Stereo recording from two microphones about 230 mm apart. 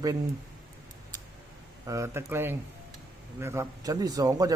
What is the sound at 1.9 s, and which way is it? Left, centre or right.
Speech, centre.